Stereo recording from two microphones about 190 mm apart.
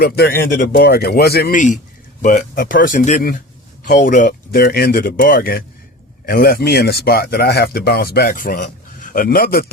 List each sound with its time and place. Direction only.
0.0 s speech: 55° left (ahead or behind)